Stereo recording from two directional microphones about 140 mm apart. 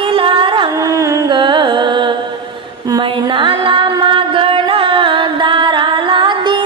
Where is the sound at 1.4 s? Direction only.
35° right (ahead or behind).